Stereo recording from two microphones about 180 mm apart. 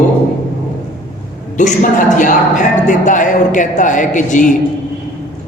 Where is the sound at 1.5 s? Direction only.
45° left (ahead or behind).